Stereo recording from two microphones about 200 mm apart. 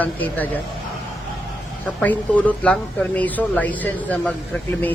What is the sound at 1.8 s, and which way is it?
Speech, 5° left (ahead or behind).